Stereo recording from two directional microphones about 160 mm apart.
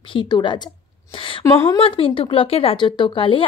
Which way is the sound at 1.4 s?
20° left (ahead or behind).